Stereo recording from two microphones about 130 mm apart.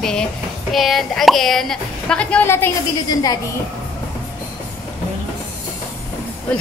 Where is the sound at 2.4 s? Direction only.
20° left (ahead or behind).